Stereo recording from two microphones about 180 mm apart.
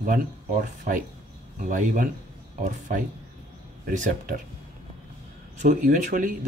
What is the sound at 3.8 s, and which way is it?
Speech, 45° right (ahead or behind).